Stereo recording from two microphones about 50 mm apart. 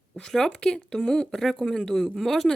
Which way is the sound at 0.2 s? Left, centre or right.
Centre.